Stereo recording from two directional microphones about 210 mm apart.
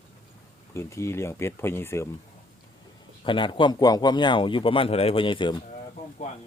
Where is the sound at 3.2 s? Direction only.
25° left (ahead or behind).